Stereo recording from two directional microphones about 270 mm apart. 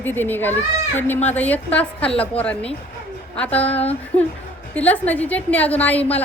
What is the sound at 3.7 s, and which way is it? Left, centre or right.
Speech, left.